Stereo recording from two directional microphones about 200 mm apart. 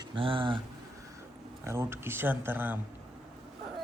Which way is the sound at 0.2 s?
25° right (ahead or behind).